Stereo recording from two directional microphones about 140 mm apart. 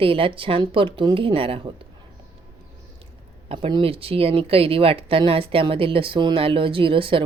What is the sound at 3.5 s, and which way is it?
Speech, 40° right (ahead or behind).